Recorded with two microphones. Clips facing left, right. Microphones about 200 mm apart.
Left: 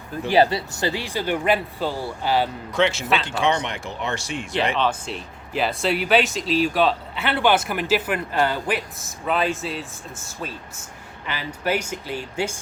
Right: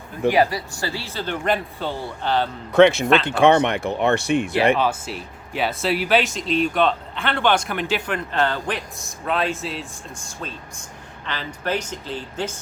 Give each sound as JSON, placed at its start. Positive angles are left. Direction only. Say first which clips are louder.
{"t": 0.3, "sound": "speech", "louder": "even", "side_deg": 30}
{"t": 2.7, "sound": "speech", "louder": "right 8 dB", "side_deg": -55}
{"t": 4.8, "sound": "speech", "louder": "right 1 dB", "side_deg": -5}